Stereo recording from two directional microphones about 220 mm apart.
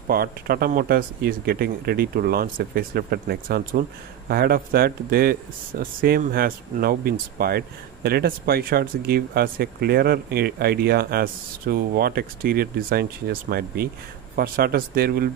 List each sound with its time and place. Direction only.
0.1 s speech: 45° right (ahead or behind)